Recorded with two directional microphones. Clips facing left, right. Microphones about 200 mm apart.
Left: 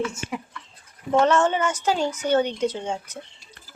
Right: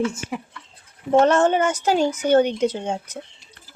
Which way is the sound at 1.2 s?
45° right (ahead or behind).